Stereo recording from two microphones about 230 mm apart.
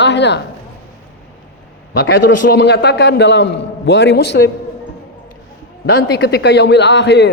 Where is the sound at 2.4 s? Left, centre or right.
Left.